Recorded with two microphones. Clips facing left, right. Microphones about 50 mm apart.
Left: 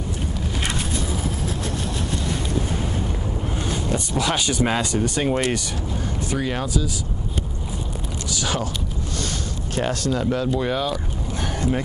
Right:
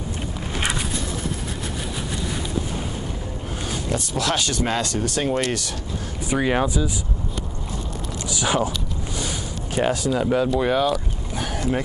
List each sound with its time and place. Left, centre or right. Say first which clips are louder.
3.7 s speech: even; centre
6.3 s speech: right 5 dB; right
8.3 s speech: right 4 dB; centre
9.8 s speech: right 2 dB; centre